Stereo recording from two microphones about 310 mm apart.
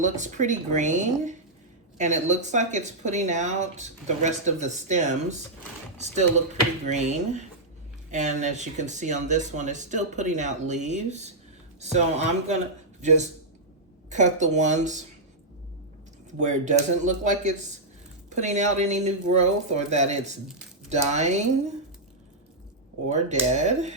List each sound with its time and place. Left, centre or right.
0.0 s a man's voice: right
16.4 s speech: right
23.0 s speech: right